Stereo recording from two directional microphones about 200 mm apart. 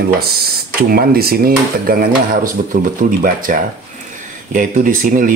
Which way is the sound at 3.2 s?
45° right (ahead or behind).